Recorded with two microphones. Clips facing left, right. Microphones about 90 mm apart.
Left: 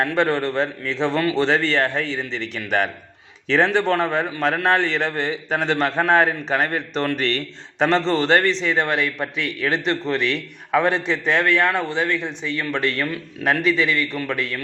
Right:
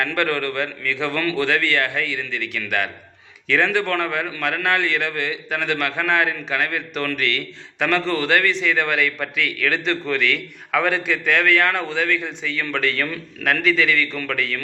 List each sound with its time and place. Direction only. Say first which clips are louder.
0.2 s a man's voice: left 3 dB; 25° left (ahead or behind)